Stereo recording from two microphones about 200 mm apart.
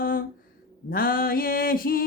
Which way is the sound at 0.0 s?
45° left (ahead or behind).